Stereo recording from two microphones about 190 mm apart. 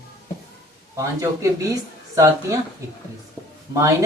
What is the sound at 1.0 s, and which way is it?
Speech, 15° right (ahead or behind).